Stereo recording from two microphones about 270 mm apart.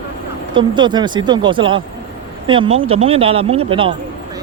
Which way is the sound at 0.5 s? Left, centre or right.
Centre.